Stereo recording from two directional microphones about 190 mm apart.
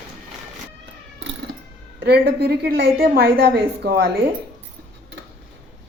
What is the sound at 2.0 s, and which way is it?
Speech, 55° right (ahead or behind).